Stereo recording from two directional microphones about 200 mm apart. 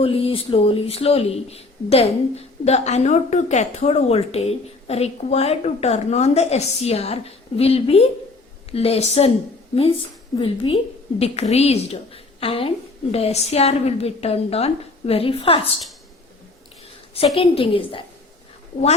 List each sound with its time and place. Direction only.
0.0 s a woman's voice: 30° left (ahead or behind)
10.3 s a woman's voice: 25° left (ahead or behind)
17.3 s a woman's voice: 30° left (ahead or behind)